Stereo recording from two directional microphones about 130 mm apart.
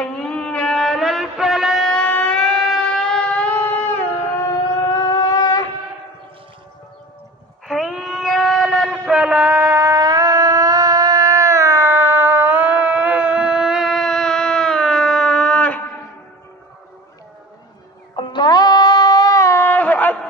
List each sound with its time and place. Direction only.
0.0 s music: 5° left (ahead or behind)
4.7 s shofar: 30° left (ahead or behind)
7.6 s a sound: centre (ahead or behind)
9.1 s shofar: 10° right (ahead or behind); by 15.8 s 10° left (ahead or behind)
18.1 s music: 35° left (ahead or behind); by 20.2 s 10° left (ahead or behind)